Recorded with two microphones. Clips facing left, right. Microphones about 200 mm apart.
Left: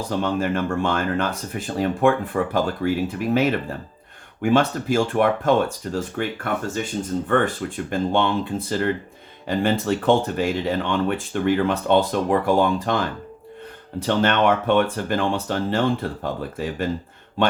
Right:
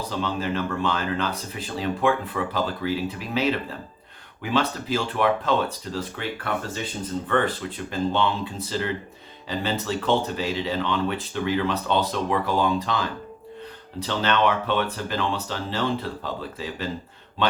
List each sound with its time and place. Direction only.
0.1 s speech: 50° left (ahead or behind)
14.1 s speech: 50° left (ahead or behind)